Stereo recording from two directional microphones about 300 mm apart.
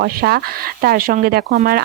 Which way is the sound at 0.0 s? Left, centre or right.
Right.